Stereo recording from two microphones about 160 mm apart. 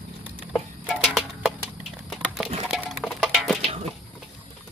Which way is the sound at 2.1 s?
Centre (ahead or behind).